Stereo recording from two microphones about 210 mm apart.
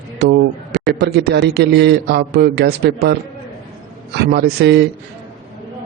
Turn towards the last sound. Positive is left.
turn(degrees=-55)  # may be behind; listen again after turning